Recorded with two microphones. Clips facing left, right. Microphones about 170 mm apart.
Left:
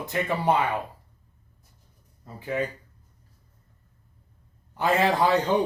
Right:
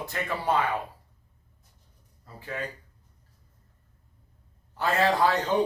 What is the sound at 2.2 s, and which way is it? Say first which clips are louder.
Speech: left 7 dB; 20° left (ahead or behind).